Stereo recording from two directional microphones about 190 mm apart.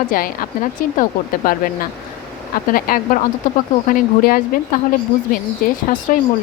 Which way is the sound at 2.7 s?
50° left (ahead or behind).